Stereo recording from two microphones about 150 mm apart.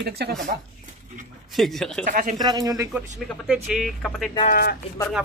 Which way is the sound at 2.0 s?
65° right (ahead or behind).